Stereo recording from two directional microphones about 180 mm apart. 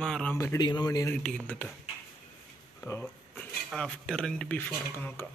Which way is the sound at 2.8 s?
10° left (ahead or behind).